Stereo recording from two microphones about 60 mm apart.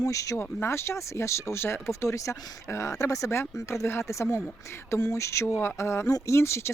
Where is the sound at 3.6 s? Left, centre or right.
Left.